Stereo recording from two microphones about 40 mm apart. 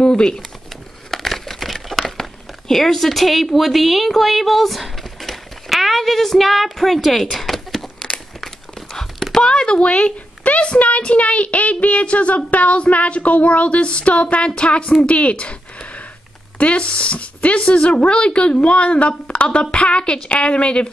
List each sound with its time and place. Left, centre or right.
0.0 s speech: centre
1.1 s crumpling: centre
2.7 s a woman's voice: centre
7.3 s a sound: centre
9.4 s speech: left